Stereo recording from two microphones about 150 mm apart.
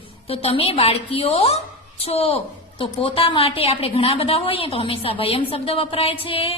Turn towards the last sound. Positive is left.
turn(degrees=40)  # may be behind; listen again after turning